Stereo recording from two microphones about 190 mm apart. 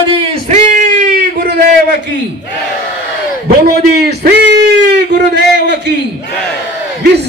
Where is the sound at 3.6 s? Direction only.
55° right (ahead or behind).